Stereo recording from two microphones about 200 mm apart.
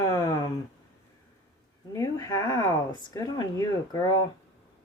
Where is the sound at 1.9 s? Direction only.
15° left (ahead or behind).